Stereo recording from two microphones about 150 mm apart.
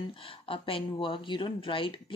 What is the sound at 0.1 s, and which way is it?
Speech, 35° left (ahead or behind).